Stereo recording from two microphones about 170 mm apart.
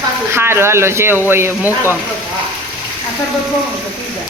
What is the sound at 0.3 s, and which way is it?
Speech, 15° right (ahead or behind).